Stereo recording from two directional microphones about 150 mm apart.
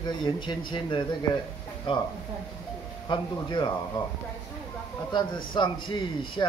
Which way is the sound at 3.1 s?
30° left (ahead or behind).